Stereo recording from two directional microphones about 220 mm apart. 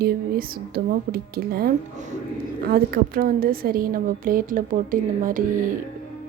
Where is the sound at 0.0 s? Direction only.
45° right (ahead or behind).